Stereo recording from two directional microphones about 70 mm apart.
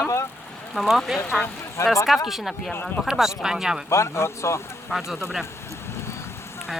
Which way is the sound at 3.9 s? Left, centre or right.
Left.